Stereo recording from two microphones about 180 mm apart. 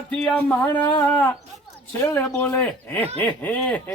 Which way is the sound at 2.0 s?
10° left (ahead or behind).